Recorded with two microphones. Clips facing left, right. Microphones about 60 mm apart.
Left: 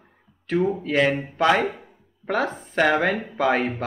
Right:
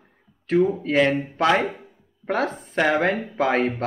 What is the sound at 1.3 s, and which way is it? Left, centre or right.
Speech, centre.